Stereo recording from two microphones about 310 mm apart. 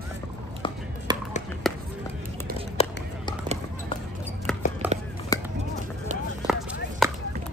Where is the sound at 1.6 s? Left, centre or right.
Centre.